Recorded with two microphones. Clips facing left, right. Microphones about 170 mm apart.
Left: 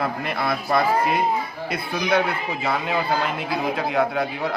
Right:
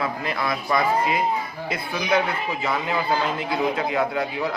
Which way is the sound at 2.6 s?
65° left (ahead or behind).